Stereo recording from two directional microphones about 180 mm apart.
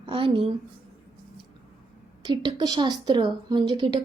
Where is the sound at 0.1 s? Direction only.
30° right (ahead or behind).